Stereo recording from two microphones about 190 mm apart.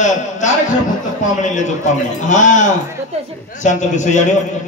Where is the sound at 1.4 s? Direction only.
40° left (ahead or behind).